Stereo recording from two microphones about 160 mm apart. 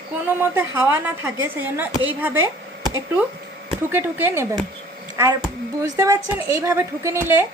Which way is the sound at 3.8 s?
15° right (ahead or behind).